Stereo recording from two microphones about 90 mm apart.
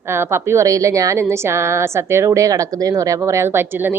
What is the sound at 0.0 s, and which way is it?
A woman's voice, 30° right (ahead or behind).